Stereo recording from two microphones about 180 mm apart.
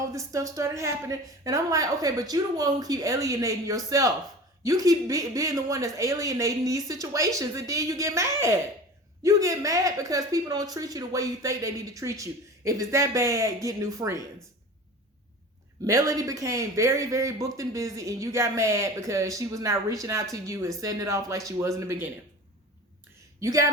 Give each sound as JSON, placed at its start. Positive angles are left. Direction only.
{"t": 0.0, "sound": "speech", "side_deg": -20}
{"t": 15.9, "sound": "speech", "side_deg": -20}
{"t": 23.4, "sound": "speech", "side_deg": -15}